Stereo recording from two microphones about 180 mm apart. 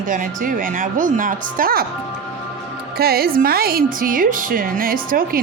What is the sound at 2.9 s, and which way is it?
A woman's voice, 60° right (ahead or behind).